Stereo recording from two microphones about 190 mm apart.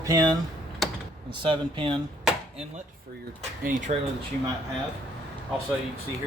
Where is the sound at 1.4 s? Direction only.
25° right (ahead or behind).